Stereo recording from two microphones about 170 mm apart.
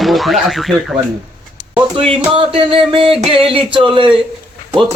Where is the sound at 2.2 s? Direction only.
30° right (ahead or behind).